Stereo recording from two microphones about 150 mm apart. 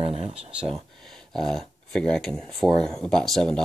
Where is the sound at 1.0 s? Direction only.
Centre (ahead or behind).